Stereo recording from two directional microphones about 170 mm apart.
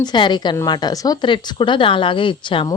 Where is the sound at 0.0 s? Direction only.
25° left (ahead or behind).